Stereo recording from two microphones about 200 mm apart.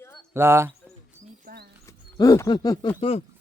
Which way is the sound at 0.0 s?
10° left (ahead or behind).